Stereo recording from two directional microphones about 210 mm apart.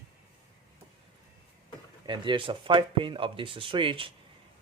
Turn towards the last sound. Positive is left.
turn(degrees=-25)  # may be behind; listen again after turning